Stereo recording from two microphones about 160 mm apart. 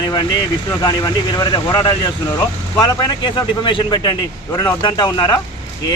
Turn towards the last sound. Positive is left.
turn(degrees=25)  # may be behind; listen again after turning